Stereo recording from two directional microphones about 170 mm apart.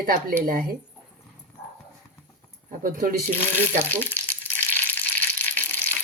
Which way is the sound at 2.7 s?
50° right (ahead or behind).